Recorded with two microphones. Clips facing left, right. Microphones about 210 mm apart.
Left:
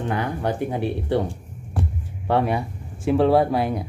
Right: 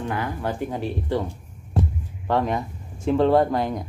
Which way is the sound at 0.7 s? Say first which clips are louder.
Left 3 dB; 65° left (ahead or behind).